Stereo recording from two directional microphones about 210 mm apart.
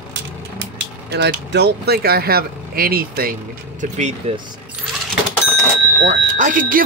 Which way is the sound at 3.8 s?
35° right (ahead or behind).